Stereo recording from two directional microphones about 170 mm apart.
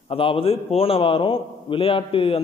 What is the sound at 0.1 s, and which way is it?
A man's voice, 30° left (ahead or behind).